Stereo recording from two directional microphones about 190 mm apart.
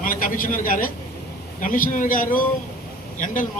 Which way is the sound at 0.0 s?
45° left (ahead or behind).